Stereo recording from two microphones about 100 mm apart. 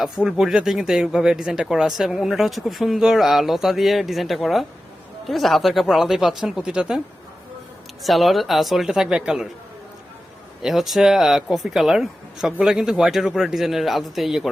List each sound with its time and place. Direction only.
0.0 s speech: 5° right (ahead or behind)
8.0 s speech: centre (ahead or behind)
10.6 s speech: 5° right (ahead or behind)